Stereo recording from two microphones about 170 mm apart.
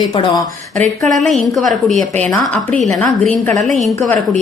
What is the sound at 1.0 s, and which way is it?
A woman's voice, centre (ahead or behind).